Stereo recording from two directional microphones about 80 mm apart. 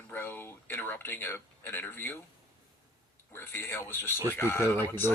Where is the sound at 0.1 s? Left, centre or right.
Left.